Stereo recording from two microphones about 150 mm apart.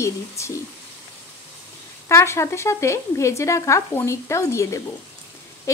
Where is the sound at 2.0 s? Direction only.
20° left (ahead or behind).